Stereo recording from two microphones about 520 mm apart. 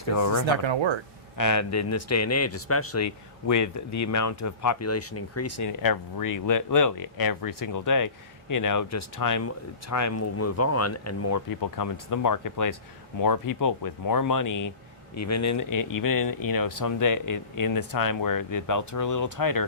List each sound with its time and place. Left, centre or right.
0.0 s speech: left
0.4 s speech: right
1.4 s speech: left